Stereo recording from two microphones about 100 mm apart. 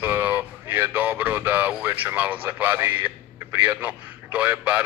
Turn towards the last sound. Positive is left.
turn(degrees=-15)  # may be behind; listen again after turning